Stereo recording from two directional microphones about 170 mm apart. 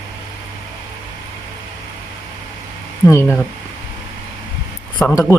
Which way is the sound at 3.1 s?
15° left (ahead or behind).